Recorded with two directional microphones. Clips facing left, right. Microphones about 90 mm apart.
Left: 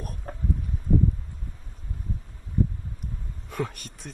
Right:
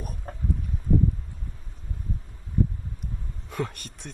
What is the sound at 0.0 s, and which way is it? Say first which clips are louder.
Chicken: even; centre (ahead or behind).